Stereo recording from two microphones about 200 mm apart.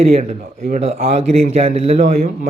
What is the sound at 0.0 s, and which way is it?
A man's voice, 30° right (ahead or behind).